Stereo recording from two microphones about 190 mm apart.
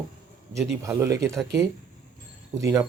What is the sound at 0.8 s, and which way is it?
Speech, 15° right (ahead or behind).